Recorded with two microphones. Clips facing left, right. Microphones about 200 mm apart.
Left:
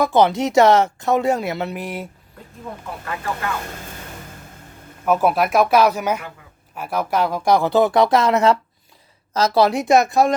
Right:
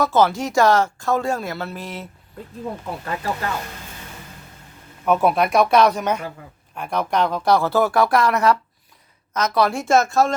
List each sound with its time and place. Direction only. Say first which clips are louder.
0.0 s speech: left 2 dB; 15° left (ahead or behind)
5.0 s speech: even; centre (ahead or behind)